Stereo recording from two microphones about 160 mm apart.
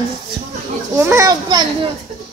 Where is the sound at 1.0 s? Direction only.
20° right (ahead or behind).